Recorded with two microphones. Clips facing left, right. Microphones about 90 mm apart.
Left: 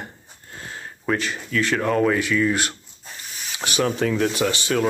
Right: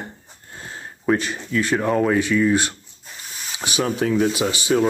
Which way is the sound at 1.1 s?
20° right (ahead or behind).